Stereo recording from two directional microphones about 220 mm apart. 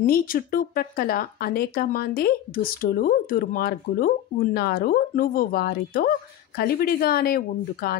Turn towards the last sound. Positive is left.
turn(degrees=45)  # may be behind; listen again after turning